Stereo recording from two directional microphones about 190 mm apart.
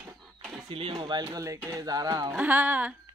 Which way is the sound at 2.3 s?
10° right (ahead or behind).